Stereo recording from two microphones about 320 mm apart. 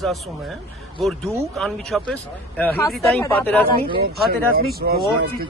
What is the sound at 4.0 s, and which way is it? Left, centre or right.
Speech, right.